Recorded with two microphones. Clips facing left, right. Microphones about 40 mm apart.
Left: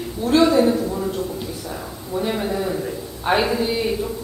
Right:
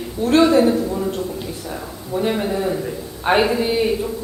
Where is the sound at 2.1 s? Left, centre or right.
Centre.